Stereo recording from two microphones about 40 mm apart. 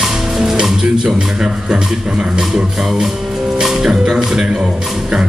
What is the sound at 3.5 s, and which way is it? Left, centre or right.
Music, centre.